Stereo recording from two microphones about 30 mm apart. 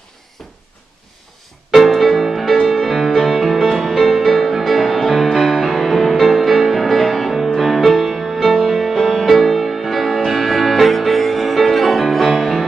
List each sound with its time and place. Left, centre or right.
2.0 s music: centre
5.4 s music: centre